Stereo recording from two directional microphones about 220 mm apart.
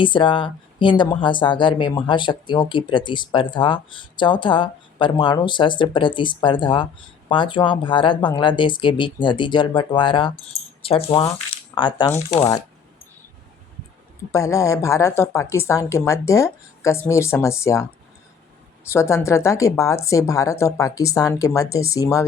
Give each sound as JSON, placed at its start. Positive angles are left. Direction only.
{"t": 0.0, "sound": "speech", "side_deg": 20}
{"t": 14.3, "sound": "a woman's voice", "side_deg": 15}
{"t": 18.9, "sound": "a woman's voice", "side_deg": 10}